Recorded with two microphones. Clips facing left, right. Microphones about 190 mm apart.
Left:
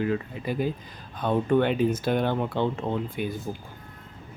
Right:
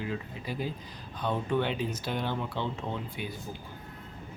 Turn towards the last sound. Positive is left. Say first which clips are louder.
# left 7 dB
turn(degrees=50)  # may be behind; listen again after turning